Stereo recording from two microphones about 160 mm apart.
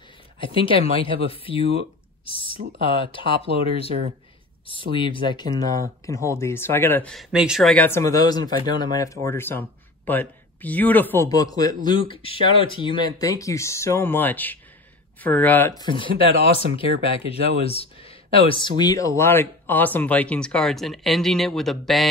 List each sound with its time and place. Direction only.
0.4 s speech: 35° left (ahead or behind)
3.9 s speech: 40° right (ahead or behind)
4.9 s speech: 30° left (ahead or behind); by 7.7 s 5° right (ahead or behind)
7.7 s speech: 15° left (ahead or behind)
15.8 s speech: 30° left (ahead or behind); by 22.0 s centre (ahead or behind)